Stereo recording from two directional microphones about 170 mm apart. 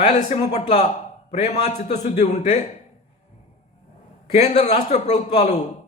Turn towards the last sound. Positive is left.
turn(degrees=40)  # may be behind; listen again after turning